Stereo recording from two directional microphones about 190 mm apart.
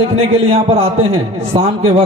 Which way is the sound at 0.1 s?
35° right (ahead or behind).